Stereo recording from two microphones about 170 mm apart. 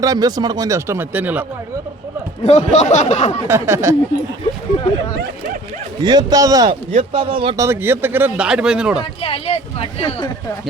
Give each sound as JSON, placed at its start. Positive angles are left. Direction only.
{"t": 0.0, "sound": "speech", "side_deg": -20}
{"t": 2.4, "sound": "speech", "side_deg": 40}
{"t": 3.4, "sound": "speech", "side_deg": -15}
{"t": 6.0, "sound": "speech", "side_deg": -25}
{"t": 7.1, "sound": "speech", "side_deg": -30}
{"t": 7.5, "sound": "speech", "side_deg": -15}
{"t": 9.2, "sound": "speech", "side_deg": 35}